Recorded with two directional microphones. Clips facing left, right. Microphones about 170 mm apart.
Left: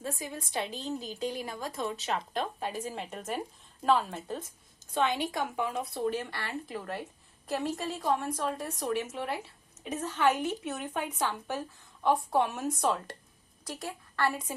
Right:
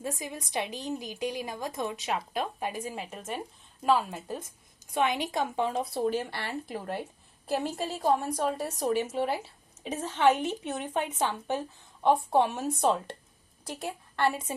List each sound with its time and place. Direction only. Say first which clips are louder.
0.0 s a woman's voice: right 1 dB; 15° right (ahead or behind)